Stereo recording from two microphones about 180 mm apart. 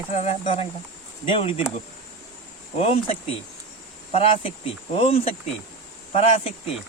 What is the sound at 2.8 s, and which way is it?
Speech, 35° left (ahead or behind).